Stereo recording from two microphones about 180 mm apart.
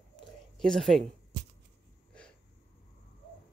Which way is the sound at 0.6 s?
Centre (ahead or behind).